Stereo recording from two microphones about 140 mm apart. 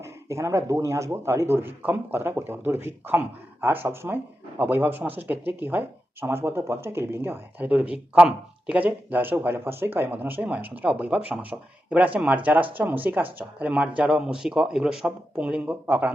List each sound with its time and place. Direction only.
0.0 s a man's voice: 20° right (ahead or behind)